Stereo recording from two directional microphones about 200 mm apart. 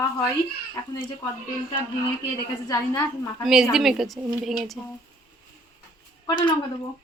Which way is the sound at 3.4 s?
Centre (ahead or behind).